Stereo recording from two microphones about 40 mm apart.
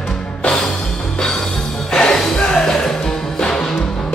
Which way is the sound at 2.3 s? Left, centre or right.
Centre.